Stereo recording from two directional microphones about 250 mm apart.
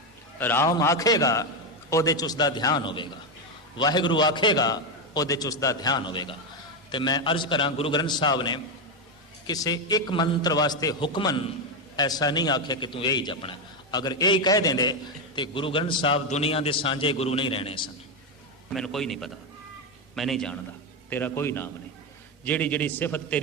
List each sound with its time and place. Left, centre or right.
0.3 s a man's voice: centre
18.7 s a man's voice: centre